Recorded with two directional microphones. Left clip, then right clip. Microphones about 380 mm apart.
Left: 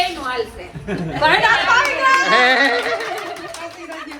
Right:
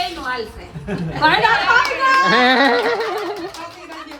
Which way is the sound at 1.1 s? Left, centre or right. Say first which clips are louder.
Even; right.